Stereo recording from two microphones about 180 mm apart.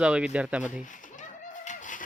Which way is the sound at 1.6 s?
45° left (ahead or behind).